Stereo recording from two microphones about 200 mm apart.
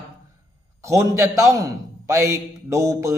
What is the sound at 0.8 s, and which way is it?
A man's voice, 15° right (ahead or behind).